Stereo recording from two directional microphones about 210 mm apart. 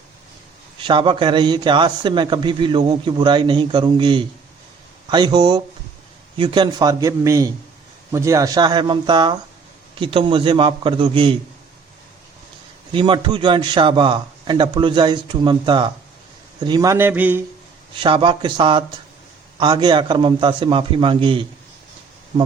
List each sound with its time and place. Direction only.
0.8 s a man's voice: 25° right (ahead or behind)
12.9 s a man's voice: 25° right (ahead or behind); by 17.4 s 10° right (ahead or behind)
17.9 s a man's voice: 25° right (ahead or behind)